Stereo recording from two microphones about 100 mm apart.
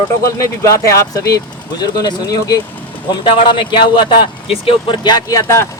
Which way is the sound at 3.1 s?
55° left (ahead or behind).